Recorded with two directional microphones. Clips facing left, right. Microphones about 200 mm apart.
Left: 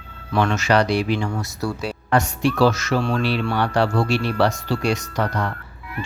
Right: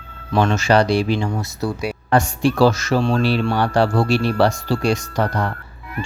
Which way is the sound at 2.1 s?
30° right (ahead or behind).